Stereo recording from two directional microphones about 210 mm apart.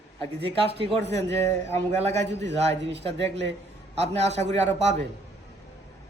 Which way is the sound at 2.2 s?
55° right (ahead or behind).